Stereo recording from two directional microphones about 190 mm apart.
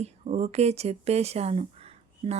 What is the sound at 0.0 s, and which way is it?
Speech, 35° right (ahead or behind).